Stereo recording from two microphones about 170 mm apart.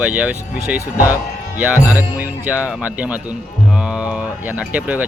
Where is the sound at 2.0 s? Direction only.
10° right (ahead or behind).